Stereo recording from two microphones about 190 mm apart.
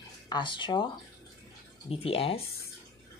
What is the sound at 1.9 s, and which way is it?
Speech, 30° left (ahead or behind).